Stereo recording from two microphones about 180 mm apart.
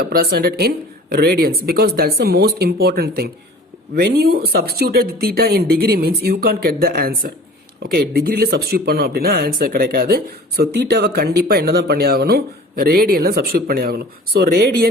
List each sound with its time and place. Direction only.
0.0 s speech: 60° right (ahead or behind)